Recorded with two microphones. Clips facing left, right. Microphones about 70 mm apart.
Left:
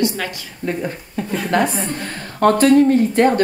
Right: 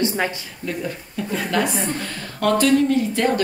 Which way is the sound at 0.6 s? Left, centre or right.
Left.